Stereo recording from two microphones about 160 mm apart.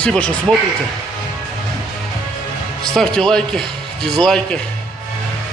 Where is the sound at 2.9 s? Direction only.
5° left (ahead or behind).